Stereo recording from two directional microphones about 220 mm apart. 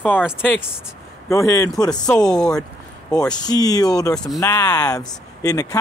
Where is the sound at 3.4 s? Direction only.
15° left (ahead or behind).